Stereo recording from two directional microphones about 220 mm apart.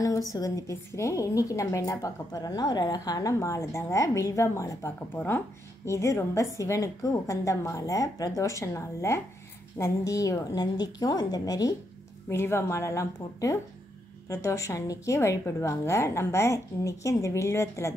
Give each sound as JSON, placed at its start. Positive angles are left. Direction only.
{"t": 0.0, "sound": "a woman's voice", "side_deg": 15}